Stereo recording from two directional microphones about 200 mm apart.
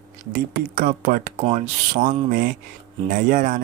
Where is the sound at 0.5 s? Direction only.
40° right (ahead or behind).